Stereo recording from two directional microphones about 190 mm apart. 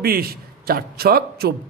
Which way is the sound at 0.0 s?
50° right (ahead or behind).